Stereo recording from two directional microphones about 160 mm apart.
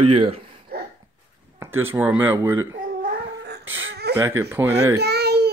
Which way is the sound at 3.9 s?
90° right.